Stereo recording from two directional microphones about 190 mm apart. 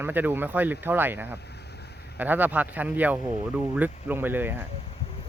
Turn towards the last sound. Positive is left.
turn(degrees=-10)  # may be behind; listen again after turning